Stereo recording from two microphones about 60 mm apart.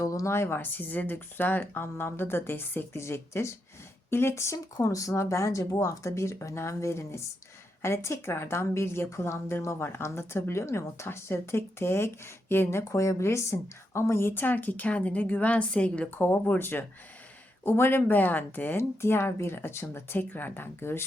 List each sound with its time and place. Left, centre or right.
0.0 s a sound: left
0.3 s speech: left
2.9 s a woman's voice: left
4.5 s a woman's voice: left; by 16.0 s centre
16.0 s speech: left